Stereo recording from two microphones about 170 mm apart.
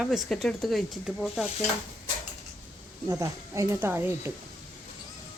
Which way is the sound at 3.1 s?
20° right (ahead or behind).